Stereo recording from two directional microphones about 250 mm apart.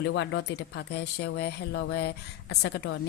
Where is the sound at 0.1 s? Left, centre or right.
Left.